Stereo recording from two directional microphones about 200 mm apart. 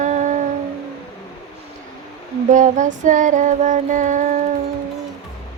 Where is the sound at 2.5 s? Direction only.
40° right (ahead or behind).